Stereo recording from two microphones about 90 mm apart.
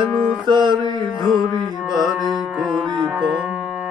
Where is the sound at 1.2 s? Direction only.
Centre (ahead or behind).